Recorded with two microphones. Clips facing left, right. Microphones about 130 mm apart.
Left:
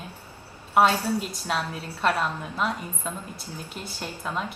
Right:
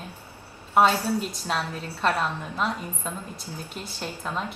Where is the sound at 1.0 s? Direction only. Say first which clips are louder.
Even; 10° left (ahead or behind).